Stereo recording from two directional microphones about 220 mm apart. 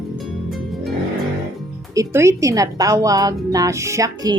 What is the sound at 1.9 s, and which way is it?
Speech, 15° right (ahead or behind).